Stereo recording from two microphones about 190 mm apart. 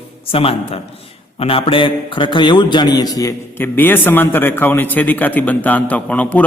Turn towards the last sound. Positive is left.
turn(degrees=5)  # may be behind; listen again after turning